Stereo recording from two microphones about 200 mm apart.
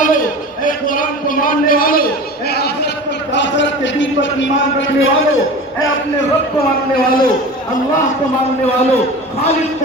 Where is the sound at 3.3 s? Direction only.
65° left (ahead or behind).